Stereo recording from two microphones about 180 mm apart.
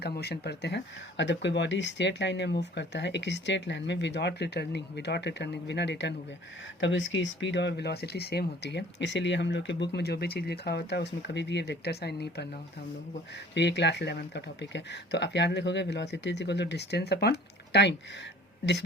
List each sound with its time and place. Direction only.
0.0 s speech: 65° left (ahead or behind)
6.7 s speech: 90° left; by 12.5 s 65° left (ahead or behind)
13.5 s speech: 75° left (ahead or behind)